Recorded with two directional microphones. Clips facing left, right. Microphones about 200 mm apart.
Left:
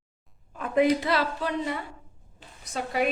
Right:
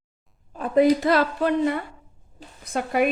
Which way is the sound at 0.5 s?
35° right (ahead or behind).